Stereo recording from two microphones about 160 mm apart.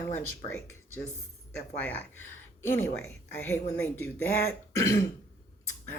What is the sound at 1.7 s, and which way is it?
Speech, 10° left (ahead or behind).